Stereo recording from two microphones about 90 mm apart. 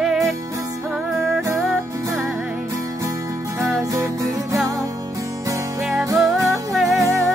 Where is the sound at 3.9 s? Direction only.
35° right (ahead or behind).